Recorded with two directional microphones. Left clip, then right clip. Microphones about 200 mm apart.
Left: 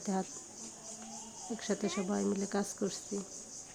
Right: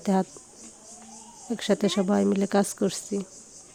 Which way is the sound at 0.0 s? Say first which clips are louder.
Right 11 dB; 45° right (ahead or behind).